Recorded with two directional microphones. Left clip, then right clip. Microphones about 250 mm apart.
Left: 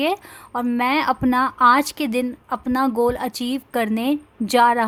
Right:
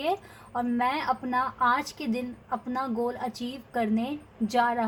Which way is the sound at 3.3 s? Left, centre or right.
Left.